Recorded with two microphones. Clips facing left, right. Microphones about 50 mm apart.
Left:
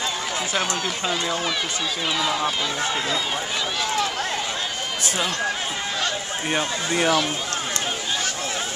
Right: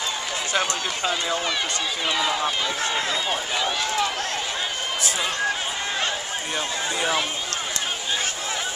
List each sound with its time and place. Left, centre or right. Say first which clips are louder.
0.7 s speech: left 1 dB; centre
6.5 s speech: left 4 dB; left